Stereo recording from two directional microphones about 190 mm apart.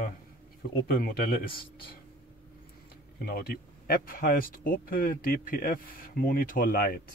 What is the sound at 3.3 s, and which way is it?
Speech, 55° left (ahead or behind).